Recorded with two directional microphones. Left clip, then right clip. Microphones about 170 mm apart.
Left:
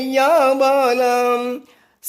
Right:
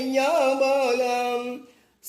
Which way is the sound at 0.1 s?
50° left (ahead or behind).